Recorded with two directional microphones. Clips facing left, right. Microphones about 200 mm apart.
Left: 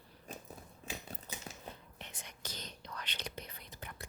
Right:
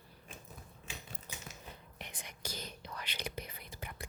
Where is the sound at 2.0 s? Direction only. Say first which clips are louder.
Right 2 dB; 15° right (ahead or behind).